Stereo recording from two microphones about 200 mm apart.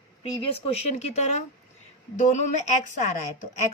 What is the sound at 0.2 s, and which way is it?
A woman's voice, 30° left (ahead or behind).